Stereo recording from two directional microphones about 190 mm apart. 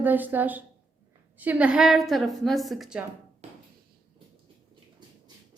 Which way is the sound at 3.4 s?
35° right (ahead or behind).